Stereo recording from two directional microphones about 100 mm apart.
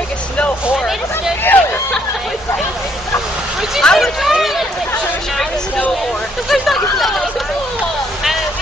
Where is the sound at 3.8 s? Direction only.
5° left (ahead or behind).